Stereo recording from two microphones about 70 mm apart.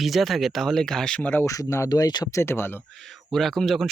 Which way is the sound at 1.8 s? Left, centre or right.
Left.